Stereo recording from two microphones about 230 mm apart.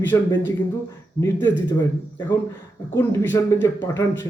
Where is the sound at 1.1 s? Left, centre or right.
Centre.